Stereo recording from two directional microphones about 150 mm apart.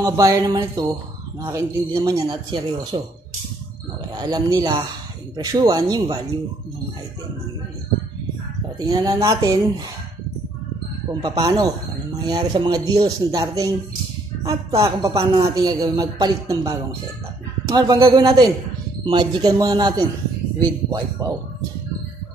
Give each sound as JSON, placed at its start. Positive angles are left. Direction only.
{"t": 0.0, "sound": "speech", "side_deg": -20}
{"t": 4.1, "sound": "speech", "side_deg": -25}
{"t": 8.7, "sound": "speech", "side_deg": -25}
{"t": 11.2, "sound": "speech", "side_deg": -30}